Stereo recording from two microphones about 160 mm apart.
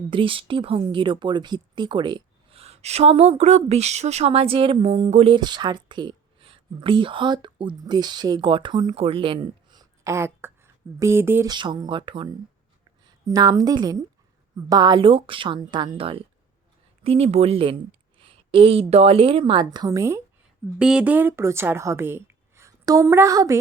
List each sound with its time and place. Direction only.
0.1 s speech: 35° right (ahead or behind); by 11.4 s 15° right (ahead or behind)
11.4 s speech: 30° right (ahead or behind)
20.7 s a woman's voice: 5° right (ahead or behind); by 23.6 s 20° right (ahead or behind)